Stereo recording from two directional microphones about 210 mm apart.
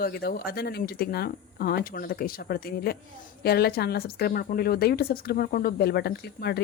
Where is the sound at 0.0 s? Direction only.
45° left (ahead or behind).